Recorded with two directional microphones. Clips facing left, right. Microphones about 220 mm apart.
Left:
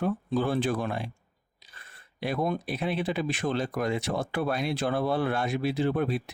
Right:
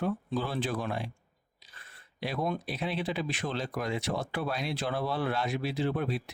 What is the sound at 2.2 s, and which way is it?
Speech, 50° left (ahead or behind).